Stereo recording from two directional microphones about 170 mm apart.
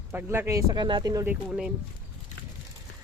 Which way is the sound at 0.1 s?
15° right (ahead or behind).